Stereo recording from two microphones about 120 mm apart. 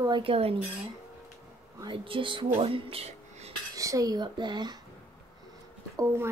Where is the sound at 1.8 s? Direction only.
45° right (ahead or behind).